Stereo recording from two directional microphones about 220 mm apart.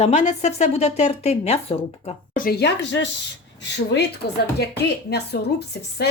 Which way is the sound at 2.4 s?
50° left (ahead or behind).